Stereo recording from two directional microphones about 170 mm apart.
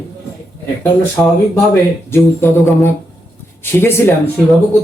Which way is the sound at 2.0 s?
15° left (ahead or behind).